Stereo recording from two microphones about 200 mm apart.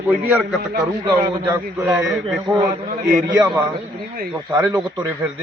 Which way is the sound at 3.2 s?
15° right (ahead or behind).